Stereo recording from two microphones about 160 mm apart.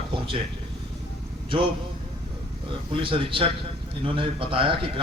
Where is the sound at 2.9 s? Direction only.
35° right (ahead or behind).